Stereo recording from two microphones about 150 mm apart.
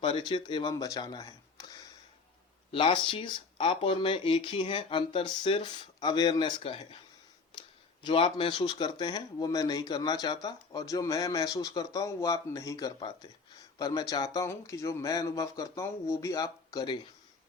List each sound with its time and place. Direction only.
0.0 s speech: 35° left (ahead or behind)
8.0 s speech: 35° left (ahead or behind)